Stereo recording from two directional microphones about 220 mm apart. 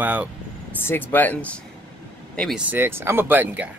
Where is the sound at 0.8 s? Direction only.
10° left (ahead or behind).